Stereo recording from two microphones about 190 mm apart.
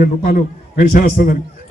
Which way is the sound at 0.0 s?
45° left (ahead or behind).